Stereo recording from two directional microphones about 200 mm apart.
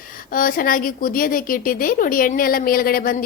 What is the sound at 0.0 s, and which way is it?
A woman's voice, 45° left (ahead or behind).